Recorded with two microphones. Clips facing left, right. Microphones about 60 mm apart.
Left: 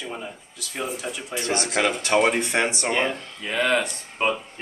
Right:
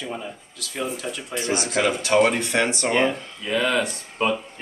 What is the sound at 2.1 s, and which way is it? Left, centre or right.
Speech, centre.